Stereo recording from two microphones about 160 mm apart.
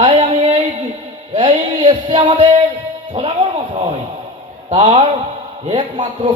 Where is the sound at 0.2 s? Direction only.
45° right (ahead or behind).